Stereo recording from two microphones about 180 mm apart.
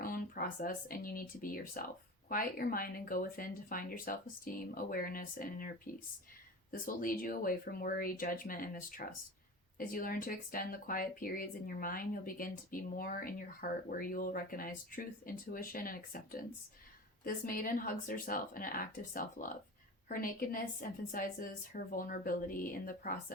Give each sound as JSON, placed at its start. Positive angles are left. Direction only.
{"t": 0.0, "sound": "speech", "side_deg": 55}